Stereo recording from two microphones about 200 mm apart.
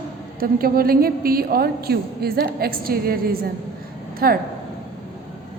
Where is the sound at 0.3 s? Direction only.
45° right (ahead or behind).